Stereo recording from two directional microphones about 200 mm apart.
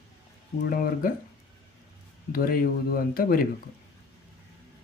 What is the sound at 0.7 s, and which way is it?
Speech, 45° left (ahead or behind).